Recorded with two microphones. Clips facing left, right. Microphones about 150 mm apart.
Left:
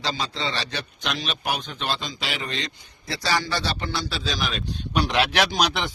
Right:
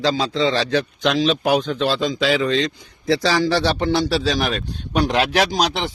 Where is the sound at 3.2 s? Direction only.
90° right; by 5.9 s 35° right (ahead or behind).